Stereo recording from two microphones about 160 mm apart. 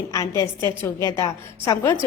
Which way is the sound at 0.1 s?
20° left (ahead or behind).